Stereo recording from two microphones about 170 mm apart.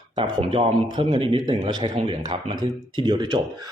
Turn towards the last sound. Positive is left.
turn(degrees=-25)  # may be behind; listen again after turning